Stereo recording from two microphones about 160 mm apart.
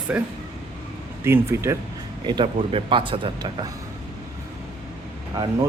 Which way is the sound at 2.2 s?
30° right (ahead or behind).